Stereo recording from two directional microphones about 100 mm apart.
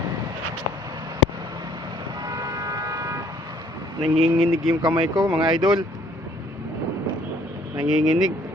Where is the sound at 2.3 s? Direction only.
35° right (ahead or behind).